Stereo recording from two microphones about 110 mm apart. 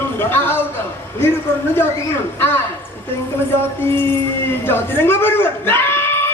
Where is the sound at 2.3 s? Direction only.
20° left (ahead or behind).